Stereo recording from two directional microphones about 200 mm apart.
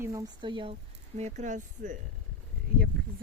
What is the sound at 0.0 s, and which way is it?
Speech, 15° right (ahead or behind).